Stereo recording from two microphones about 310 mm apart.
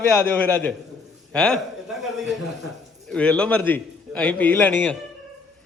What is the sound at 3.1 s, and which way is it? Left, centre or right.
A man's voice, centre.